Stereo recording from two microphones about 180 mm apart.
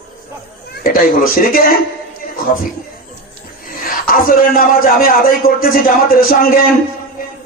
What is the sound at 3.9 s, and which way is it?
Speech, 50° left (ahead or behind).